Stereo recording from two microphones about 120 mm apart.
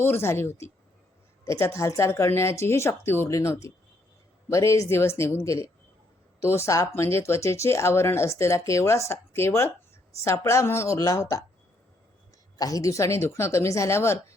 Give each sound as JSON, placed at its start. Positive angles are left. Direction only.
{"t": 0.0, "sound": "speech", "side_deg": 20}
{"t": 12.5, "sound": "speech", "side_deg": 30}